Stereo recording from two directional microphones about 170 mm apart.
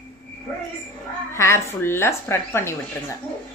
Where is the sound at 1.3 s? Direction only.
15° left (ahead or behind).